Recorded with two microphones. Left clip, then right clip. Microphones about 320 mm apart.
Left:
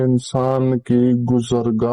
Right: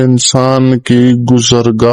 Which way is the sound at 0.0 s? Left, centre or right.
Right.